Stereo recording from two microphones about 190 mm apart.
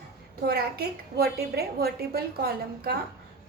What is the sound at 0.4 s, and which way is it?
A woman's voice, 55° right (ahead or behind).